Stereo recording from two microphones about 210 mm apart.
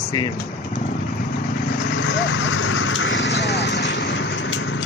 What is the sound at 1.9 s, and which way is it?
Vehicle, 60° left (ahead or behind).